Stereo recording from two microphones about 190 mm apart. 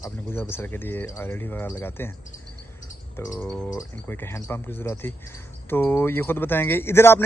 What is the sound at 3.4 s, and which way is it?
Speech, 5° left (ahead or behind).